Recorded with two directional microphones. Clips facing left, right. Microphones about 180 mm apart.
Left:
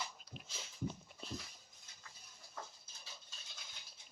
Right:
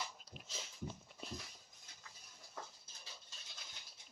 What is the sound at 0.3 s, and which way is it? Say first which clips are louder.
Dog: left 2 dB; 40° right (ahead or behind).